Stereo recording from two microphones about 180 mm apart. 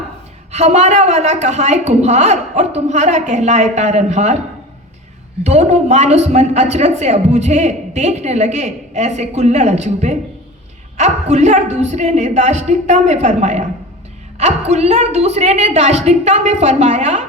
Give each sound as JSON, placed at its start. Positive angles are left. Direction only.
{"t": 0.5, "sound": "a woman's voice", "side_deg": -40}
{"t": 5.4, "sound": "a woman's voice", "side_deg": -40}